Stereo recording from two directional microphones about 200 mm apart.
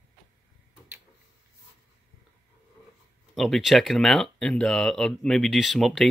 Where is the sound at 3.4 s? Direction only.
Centre (ahead or behind).